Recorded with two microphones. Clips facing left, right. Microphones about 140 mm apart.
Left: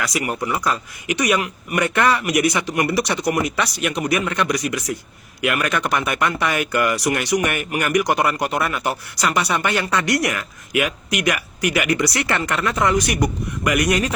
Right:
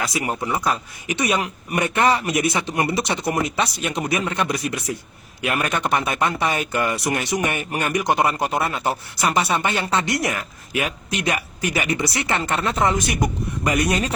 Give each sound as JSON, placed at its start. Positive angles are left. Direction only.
{"t": 0.0, "sound": "speech", "side_deg": -25}